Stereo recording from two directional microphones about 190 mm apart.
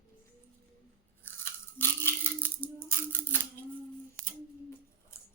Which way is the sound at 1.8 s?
10° left (ahead or behind).